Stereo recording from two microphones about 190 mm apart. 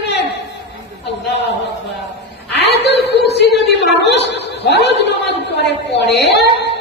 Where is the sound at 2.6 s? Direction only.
60° left (ahead or behind).